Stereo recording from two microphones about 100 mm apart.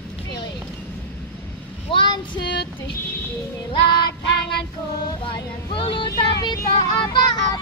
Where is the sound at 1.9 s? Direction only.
55° left (ahead or behind).